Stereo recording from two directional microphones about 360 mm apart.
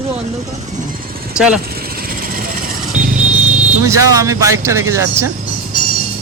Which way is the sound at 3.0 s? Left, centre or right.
Right.